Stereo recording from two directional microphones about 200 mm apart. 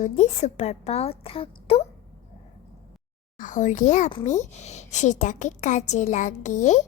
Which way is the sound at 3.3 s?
40° left (ahead or behind).